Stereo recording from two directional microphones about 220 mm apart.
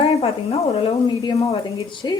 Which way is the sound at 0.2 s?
25° left (ahead or behind).